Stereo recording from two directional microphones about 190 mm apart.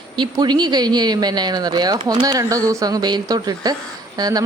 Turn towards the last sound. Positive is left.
turn(degrees=-20)  # may be behind; listen again after turning